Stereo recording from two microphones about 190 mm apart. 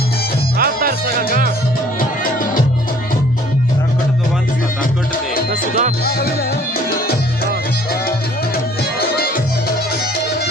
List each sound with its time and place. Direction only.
0.6 s music: 50° right (ahead or behind)
2.0 s music: 50° left (ahead or behind)
6.1 s music: 55° left (ahead or behind)
9.0 s music: 55° left (ahead or behind)